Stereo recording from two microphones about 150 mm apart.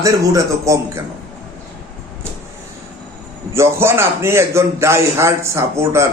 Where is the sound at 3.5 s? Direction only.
15° right (ahead or behind).